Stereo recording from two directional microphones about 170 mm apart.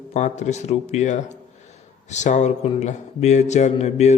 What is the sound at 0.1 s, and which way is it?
A man's voice, 40° left (ahead or behind).